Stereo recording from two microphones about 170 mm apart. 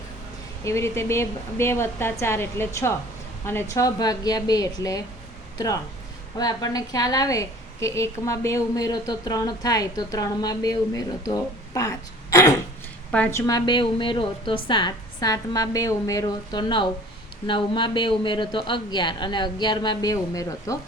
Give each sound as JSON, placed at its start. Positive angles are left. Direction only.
{"t": 0.6, "sound": "a woman's voice", "side_deg": 15}
{"t": 13.1, "sound": "a woman's voice", "side_deg": 10}
{"t": 13.5, "sound": "a woman's voice", "side_deg": 30}